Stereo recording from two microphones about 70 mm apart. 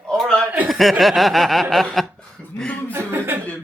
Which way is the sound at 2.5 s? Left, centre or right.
Centre.